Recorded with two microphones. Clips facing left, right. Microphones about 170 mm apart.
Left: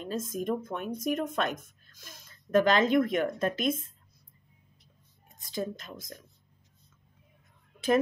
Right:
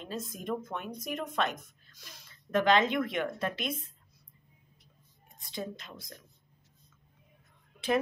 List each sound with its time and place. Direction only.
0.0 s speech: 45° left (ahead or behind)
5.5 s speech: 45° left (ahead or behind)
7.8 s speech: 45° left (ahead or behind)